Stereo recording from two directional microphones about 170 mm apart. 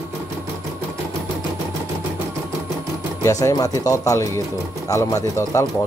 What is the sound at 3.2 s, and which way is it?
Speech, 20° left (ahead or behind).